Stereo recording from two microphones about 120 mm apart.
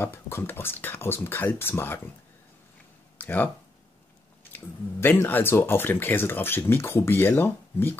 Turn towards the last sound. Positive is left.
turn(degrees=20)  # may be behind; listen again after turning